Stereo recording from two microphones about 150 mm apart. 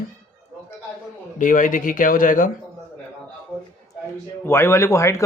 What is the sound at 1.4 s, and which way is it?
Speech, 60° left (ahead or behind).